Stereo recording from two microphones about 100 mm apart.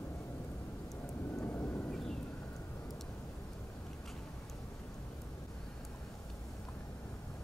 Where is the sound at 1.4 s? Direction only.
20° left (ahead or behind).